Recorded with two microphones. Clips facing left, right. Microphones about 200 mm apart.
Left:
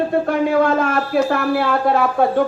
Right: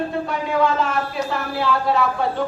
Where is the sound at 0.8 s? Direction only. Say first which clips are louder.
Left 6 dB; 55° left (ahead or behind).